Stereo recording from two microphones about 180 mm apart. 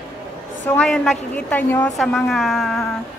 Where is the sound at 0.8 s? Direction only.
Centre (ahead or behind).